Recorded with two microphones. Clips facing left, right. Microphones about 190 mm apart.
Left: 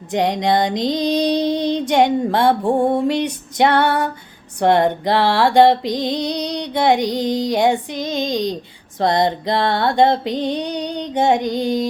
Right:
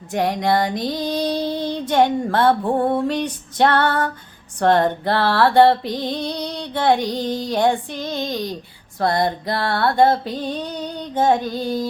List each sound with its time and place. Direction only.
0.1 s female singing: 20° left (ahead or behind)
1.9 s music: 15° left (ahead or behind)